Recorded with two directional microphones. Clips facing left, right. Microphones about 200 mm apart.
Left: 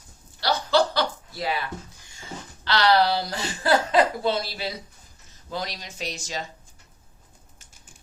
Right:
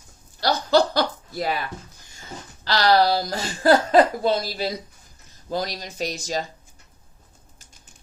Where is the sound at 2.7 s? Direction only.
40° right (ahead or behind).